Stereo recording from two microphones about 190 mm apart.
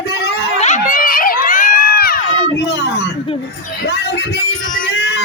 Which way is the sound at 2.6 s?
60° left (ahead or behind).